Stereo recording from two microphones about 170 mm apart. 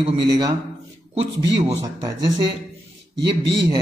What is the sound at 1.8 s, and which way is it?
Speech, 25° right (ahead or behind).